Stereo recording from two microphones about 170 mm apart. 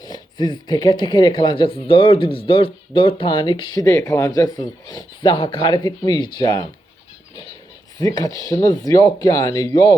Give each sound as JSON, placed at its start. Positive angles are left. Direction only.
{"t": 0.0, "sound": "speech", "side_deg": 25}
{"t": 7.9, "sound": "speech", "side_deg": 25}